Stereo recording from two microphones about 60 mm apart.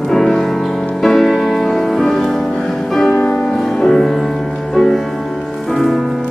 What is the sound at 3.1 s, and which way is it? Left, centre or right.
Music, left.